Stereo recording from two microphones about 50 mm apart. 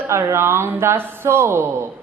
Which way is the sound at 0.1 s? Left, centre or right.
Right.